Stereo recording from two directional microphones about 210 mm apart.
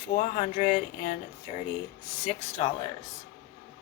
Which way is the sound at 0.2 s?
40° left (ahead or behind).